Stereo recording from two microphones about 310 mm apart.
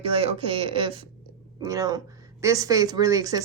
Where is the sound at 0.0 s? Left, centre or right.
Centre.